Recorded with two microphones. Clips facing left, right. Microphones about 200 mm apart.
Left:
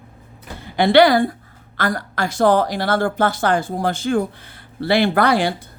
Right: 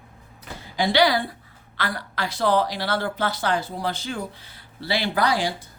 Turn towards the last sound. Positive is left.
turn(degrees=60)  # may be behind; listen again after turning